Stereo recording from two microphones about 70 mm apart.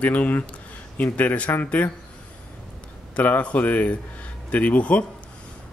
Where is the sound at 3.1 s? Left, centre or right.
Left.